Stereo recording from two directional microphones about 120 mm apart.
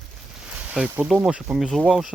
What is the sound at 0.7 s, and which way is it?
Speech, 10° right (ahead or behind).